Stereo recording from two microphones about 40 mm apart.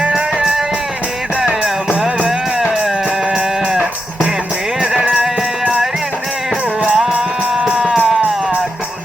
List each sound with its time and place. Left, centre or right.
1.4 s music: right
2.0 s music: centre
5.6 s music: right